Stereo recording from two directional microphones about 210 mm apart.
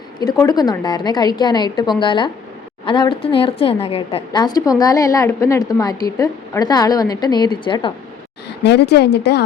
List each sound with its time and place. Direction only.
0.3 s a woman's voice: 15° left (ahead or behind)
8.6 s a woman's voice: 55° left (ahead or behind)